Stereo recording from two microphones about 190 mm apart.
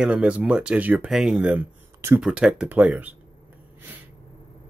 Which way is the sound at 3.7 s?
10° right (ahead or behind).